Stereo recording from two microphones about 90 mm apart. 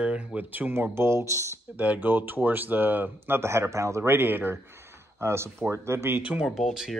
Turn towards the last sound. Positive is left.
turn(degrees=0)  # may be behind; listen again after turning